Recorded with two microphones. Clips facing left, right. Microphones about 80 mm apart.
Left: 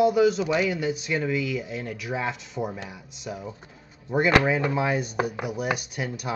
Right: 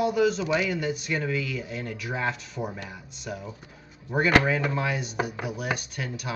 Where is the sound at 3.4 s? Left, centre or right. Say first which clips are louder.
Left 2 dB; centre.